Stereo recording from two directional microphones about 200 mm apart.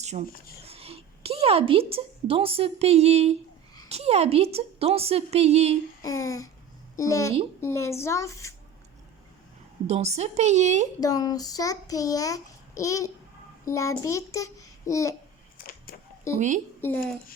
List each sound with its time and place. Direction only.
0.0 s a woman's voice: 35° right (ahead or behind)
6.0 s a child's voice: 15° left (ahead or behind)
9.8 s a woman's voice: 30° right (ahead or behind)
11.0 s a child's voice: 20° left (ahead or behind)
15.5 s a sound: 45° left (ahead or behind)
16.3 s a child's voice: 15° left (ahead or behind)